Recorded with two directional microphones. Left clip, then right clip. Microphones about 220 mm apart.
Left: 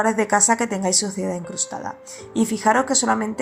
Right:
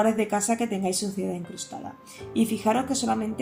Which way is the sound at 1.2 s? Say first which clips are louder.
Left 5 dB; 55° left (ahead or behind).